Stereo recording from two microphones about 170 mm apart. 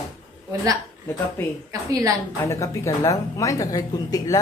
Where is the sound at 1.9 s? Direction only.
20° right (ahead or behind).